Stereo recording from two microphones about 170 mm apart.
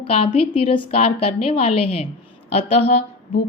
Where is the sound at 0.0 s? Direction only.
35° left (ahead or behind).